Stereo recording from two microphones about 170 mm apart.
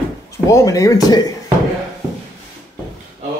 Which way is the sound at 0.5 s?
20° left (ahead or behind).